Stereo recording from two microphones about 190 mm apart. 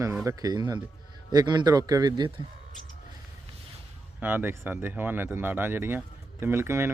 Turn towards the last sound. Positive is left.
turn(degrees=-15)  # may be behind; listen again after turning